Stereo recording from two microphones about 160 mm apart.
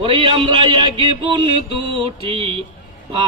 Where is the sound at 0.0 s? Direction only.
35° right (ahead or behind).